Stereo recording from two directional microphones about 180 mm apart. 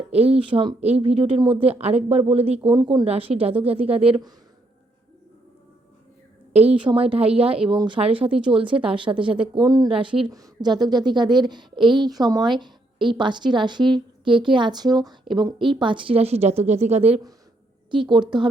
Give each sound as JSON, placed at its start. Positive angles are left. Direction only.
{"t": 0.1, "sound": "speech", "side_deg": -35}
{"t": 6.5, "sound": "a woman's voice", "side_deg": -35}